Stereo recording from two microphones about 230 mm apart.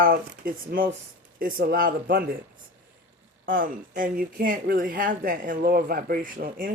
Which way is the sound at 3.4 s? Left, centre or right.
Right.